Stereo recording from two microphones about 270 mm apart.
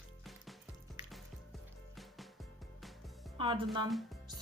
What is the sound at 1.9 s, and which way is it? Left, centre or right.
Music, centre.